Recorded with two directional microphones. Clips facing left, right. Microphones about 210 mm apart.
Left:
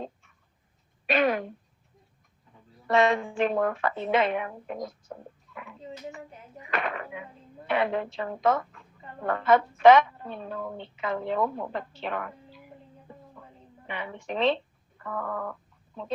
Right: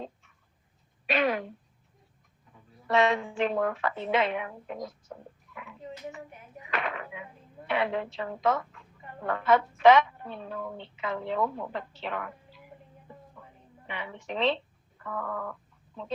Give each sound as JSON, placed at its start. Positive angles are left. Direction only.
{"t": 1.0, "sound": "speech", "side_deg": 45}
{"t": 2.8, "sound": "a woman's voice", "side_deg": 50}
{"t": 5.5, "sound": "a sound", "side_deg": 45}
{"t": 6.7, "sound": "a woman's voice", "side_deg": 50}
{"t": 13.8, "sound": "speech", "side_deg": 45}